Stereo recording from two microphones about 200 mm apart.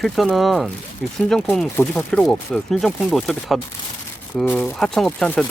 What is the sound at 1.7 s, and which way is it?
Speech, 10° left (ahead or behind).